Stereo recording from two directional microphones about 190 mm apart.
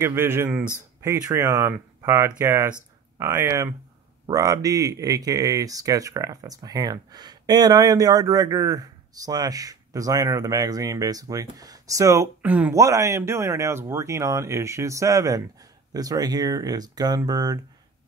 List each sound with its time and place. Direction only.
0.0 s speech: 10° right (ahead or behind)